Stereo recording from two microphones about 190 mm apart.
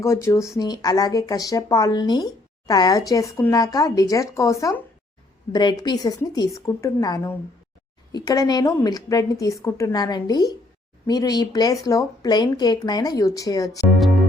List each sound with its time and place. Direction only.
0.0 s speech: 15° left (ahead or behind)